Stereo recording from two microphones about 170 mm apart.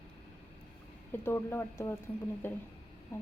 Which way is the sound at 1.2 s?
15° left (ahead or behind).